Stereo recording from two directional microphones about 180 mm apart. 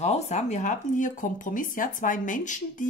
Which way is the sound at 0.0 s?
40° left (ahead or behind).